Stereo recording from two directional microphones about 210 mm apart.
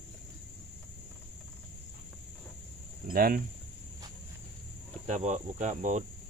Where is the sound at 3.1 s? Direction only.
45° right (ahead or behind).